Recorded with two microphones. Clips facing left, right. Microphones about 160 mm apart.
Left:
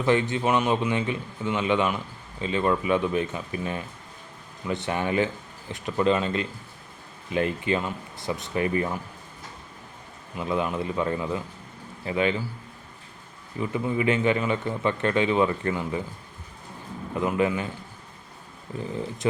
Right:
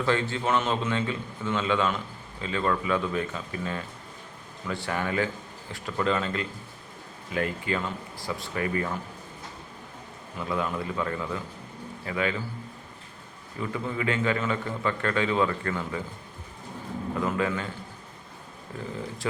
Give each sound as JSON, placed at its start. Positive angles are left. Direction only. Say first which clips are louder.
{"t": 0.0, "sound": "a man's voice", "louder": "left 4 dB", "side_deg": 20}
{"t": 10.3, "sound": "a man's voice", "louder": "left 3 dB", "side_deg": 20}
{"t": 13.6, "sound": "a man's voice", "louder": "left 4 dB", "side_deg": 20}
{"t": 17.2, "sound": "a man's voice", "louder": "left 4 dB", "side_deg": 20}
{"t": 19.2, "sound": "a man's voice", "louder": "left 6 dB", "side_deg": 20}